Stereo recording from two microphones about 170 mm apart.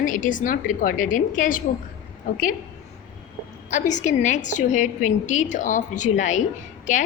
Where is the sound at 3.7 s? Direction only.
45° left (ahead or behind).